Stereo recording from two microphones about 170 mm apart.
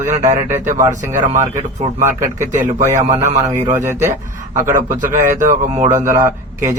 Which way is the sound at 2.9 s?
20° right (ahead or behind).